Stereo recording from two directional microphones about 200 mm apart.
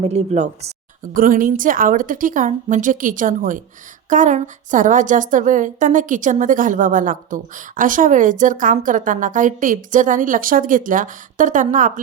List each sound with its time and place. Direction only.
0.0 s a woman's voice: 35° right (ahead or behind)